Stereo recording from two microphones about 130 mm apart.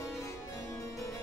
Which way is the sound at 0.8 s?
25° left (ahead or behind).